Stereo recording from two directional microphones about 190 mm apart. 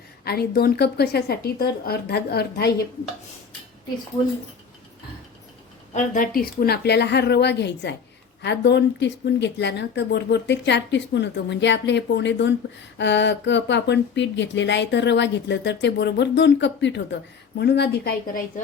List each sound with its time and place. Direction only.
0.3 s speech: 55° left (ahead or behind)
5.9 s speech: 45° left (ahead or behind); by 18.1 s 60° left (ahead or behind)